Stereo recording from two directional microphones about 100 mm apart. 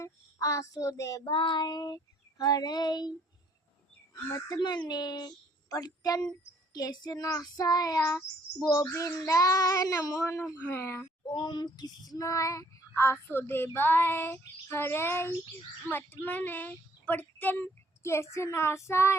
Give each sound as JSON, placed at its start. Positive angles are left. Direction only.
{"t": 0.0, "sound": "child singing", "side_deg": 35}
{"t": 1.3, "sound": "child singing", "side_deg": 55}
{"t": 4.1, "sound": "child singing", "side_deg": 40}
{"t": 4.9, "sound": "speech", "side_deg": 45}
{"t": 6.7, "sound": "child singing", "side_deg": 40}
{"t": 10.6, "sound": "child singing", "side_deg": 20}
{"t": 11.3, "sound": "child singing", "side_deg": 45}